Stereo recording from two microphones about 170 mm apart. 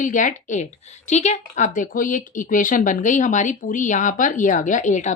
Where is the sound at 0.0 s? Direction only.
50° left (ahead or behind).